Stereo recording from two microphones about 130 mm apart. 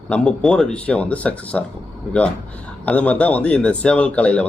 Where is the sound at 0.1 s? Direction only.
5° left (ahead or behind).